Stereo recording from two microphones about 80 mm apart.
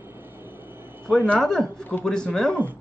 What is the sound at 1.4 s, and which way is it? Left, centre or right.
Speech, centre.